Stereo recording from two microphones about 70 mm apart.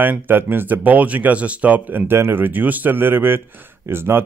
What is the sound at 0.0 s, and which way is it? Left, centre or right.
Speech, right.